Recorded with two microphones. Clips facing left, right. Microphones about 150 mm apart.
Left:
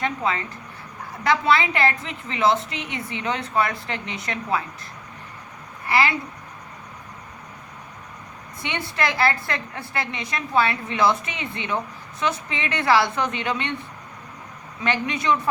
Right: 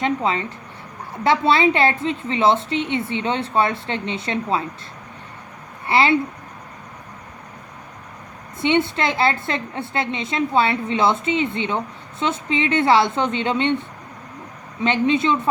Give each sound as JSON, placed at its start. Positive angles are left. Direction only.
{"t": 0.0, "sound": "a woman's voice", "side_deg": -25}
{"t": 5.8, "sound": "speech", "side_deg": -25}
{"t": 8.6, "sound": "a woman's voice", "side_deg": -25}
{"t": 14.8, "sound": "a woman's voice", "side_deg": -25}